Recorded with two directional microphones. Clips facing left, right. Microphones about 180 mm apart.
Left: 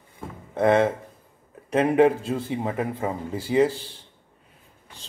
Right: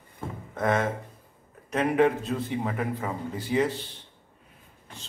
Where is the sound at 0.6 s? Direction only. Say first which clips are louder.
Left 7 dB; 30° left (ahead or behind).